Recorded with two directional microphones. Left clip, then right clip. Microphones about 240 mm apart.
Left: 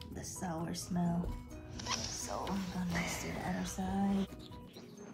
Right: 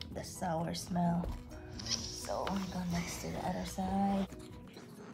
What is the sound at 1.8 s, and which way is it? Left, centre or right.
Music, centre.